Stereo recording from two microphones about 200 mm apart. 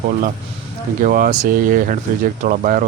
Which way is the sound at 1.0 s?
45° right (ahead or behind).